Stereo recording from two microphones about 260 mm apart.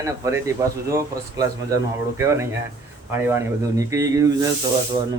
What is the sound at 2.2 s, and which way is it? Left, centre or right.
Speech, centre.